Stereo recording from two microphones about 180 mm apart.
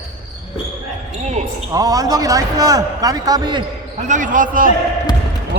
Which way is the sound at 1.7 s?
20° right (ahead or behind).